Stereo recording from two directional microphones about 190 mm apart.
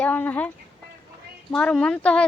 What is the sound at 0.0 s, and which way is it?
A woman's voice, 10° left (ahead or behind).